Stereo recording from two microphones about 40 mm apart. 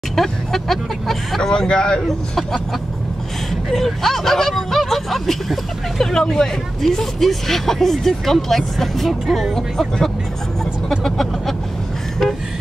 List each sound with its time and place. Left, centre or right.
0.1 s speech: centre
1.5 s speech: centre
2.0 s speech: centre
3.7 s speech: centre
11.1 s vehicle: centre